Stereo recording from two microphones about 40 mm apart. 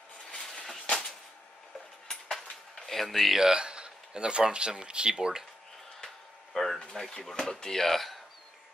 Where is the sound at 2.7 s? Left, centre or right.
Centre.